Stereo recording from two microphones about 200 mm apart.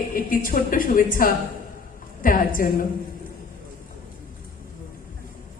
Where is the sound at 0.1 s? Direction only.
45° left (ahead or behind).